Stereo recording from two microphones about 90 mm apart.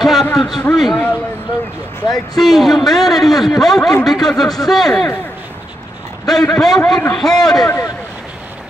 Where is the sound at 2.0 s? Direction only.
45° left (ahead or behind).